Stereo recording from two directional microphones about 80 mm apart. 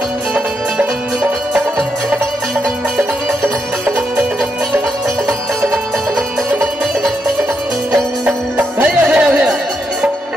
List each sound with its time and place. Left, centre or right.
0.3 s music: centre
7.9 s music: centre